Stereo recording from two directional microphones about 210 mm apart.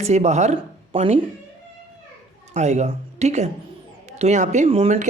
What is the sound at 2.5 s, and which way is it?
Speech, 35° right (ahead or behind).